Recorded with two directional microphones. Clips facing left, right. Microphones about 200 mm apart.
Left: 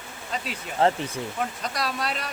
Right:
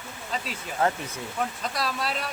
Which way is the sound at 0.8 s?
30° left (ahead or behind).